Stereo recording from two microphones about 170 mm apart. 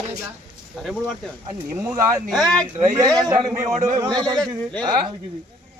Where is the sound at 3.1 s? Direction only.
20° right (ahead or behind).